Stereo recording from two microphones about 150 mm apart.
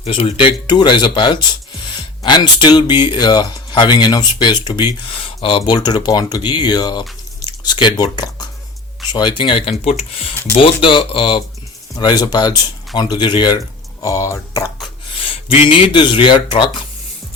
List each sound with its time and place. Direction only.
0.0 s speech: 40° left (ahead or behind); by 14.7 s 20° left (ahead or behind)
15.2 s speech: 35° left (ahead or behind)